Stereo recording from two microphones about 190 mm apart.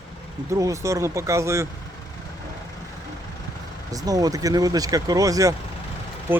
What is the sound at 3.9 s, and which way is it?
Speech, 20° right (ahead or behind).